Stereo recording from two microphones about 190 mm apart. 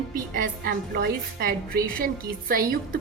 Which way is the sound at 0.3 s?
50° right (ahead or behind).